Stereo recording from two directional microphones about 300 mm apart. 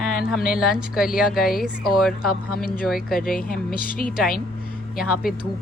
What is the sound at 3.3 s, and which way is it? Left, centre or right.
Speech, left.